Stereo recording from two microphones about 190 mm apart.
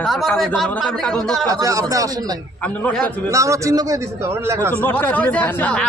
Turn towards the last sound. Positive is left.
turn(degrees=10)  # may be behind; listen again after turning